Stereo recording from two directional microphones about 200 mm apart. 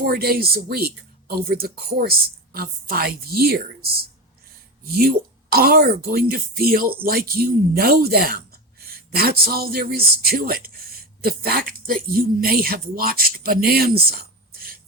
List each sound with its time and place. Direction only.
0.0 s speech: 50° right (ahead or behind)